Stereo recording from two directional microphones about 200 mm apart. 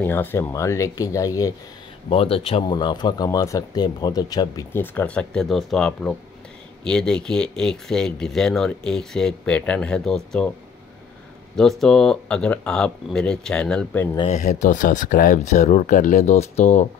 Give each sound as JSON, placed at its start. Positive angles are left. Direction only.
{"t": 0.0, "sound": "speech", "side_deg": 10}
{"t": 2.0, "sound": "speech", "side_deg": 30}
{"t": 11.5, "sound": "speech", "side_deg": 0}
{"t": 14.1, "sound": "speech", "side_deg": 30}